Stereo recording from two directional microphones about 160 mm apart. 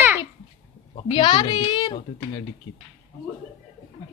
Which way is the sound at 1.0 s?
30° left (ahead or behind).